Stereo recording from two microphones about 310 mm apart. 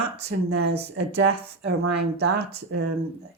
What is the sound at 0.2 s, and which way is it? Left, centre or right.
Speech, right.